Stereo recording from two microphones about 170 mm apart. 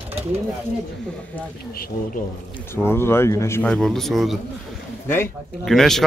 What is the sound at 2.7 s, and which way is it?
A man's voice, 15° left (ahead or behind).